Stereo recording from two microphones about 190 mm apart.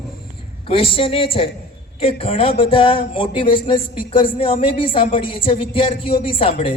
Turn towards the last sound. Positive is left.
turn(degrees=30)  # may be behind; listen again after turning